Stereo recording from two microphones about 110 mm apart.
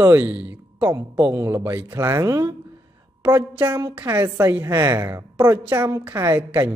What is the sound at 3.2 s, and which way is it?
A woman's voice, 15° right (ahead or behind).